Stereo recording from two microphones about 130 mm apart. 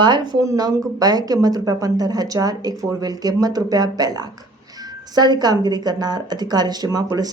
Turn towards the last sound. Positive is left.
turn(degrees=-30)  # may be behind; listen again after turning